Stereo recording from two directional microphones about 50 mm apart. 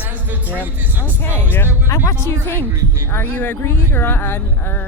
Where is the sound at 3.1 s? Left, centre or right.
Left.